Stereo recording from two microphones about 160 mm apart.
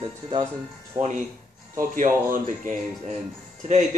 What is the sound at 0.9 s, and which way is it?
A man's voice, 45° right (ahead or behind).